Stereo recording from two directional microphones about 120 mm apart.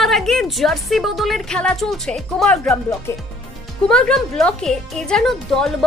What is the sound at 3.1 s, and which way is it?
Speech, 20° left (ahead or behind).